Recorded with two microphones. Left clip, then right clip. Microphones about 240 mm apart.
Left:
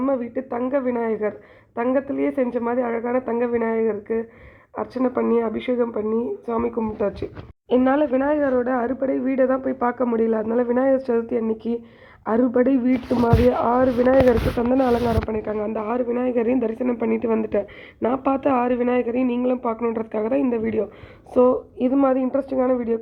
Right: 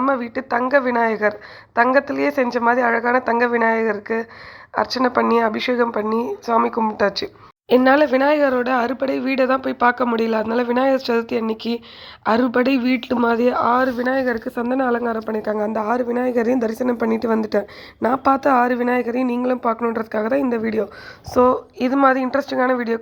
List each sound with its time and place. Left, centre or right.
0.0 s speech: right
0.3 s a woman's voice: centre
20.1 s speech: right
21.4 s speech: centre